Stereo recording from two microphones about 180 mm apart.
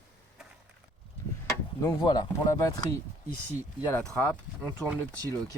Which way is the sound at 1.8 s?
20° left (ahead or behind).